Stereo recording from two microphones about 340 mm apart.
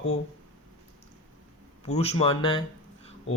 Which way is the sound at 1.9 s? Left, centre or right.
Centre.